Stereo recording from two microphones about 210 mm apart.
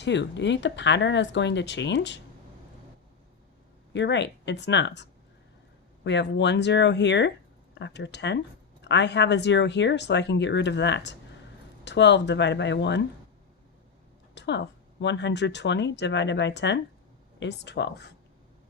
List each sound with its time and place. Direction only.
0.0 s speech: 55° left (ahead or behind)
3.9 s speech: 55° left (ahead or behind)
6.1 s speech: 55° left (ahead or behind)
14.3 s speech: 55° left (ahead or behind)